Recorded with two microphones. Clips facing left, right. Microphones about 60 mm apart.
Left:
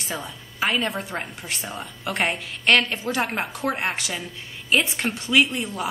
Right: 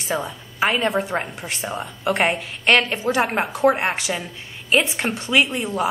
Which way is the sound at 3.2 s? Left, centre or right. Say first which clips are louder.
Right 6 dB; centre.